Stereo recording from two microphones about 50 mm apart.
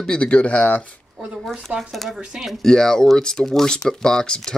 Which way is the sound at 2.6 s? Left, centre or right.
Centre.